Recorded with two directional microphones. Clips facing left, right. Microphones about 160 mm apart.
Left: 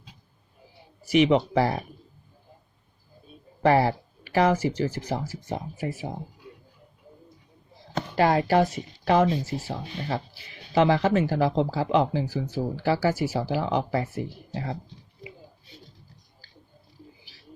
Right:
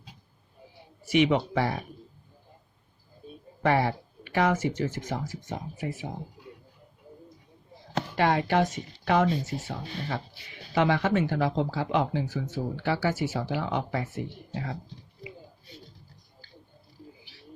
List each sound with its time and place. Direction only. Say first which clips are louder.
1.0 s speech: left 3 dB; 35° left (ahead or behind)
3.6 s speech: left 4 dB; 35° left (ahead or behind)
8.1 s speech: left 4 dB; 35° left (ahead or behind)